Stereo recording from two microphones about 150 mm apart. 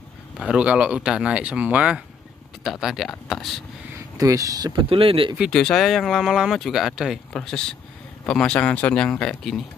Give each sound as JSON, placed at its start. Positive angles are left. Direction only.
{"t": 0.4, "sound": "speech", "side_deg": -5}
{"t": 4.2, "sound": "speech", "side_deg": -20}
{"t": 4.8, "sound": "speech", "side_deg": -35}
{"t": 5.4, "sound": "speech", "side_deg": 5}